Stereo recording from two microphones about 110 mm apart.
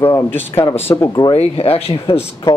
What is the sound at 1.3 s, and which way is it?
Speech, 65° left (ahead or behind).